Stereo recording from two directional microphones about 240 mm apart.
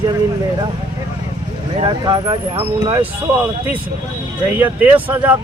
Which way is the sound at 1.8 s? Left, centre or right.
Centre.